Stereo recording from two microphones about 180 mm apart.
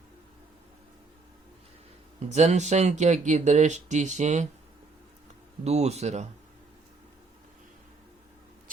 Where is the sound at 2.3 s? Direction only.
40° right (ahead or behind).